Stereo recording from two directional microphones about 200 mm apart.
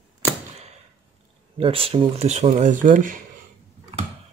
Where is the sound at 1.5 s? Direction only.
30° right (ahead or behind).